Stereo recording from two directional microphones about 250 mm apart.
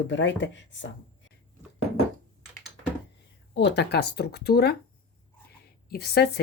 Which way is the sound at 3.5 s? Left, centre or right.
Left.